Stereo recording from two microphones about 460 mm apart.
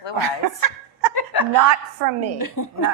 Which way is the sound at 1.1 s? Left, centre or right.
Left.